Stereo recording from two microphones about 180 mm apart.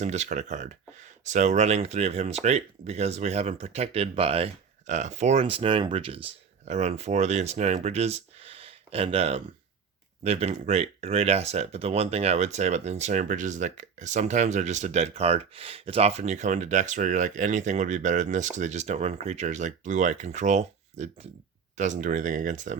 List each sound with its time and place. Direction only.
0.0 s speech: 40° right (ahead or behind)